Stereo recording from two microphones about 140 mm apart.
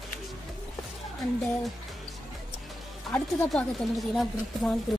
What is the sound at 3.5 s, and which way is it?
A woman's voice, centre (ahead or behind).